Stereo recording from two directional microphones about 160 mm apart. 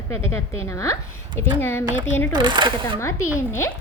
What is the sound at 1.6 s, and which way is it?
Speech, 15° left (ahead or behind).